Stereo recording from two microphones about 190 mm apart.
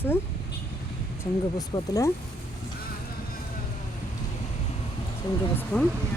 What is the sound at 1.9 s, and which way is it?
Speech, 15° left (ahead or behind).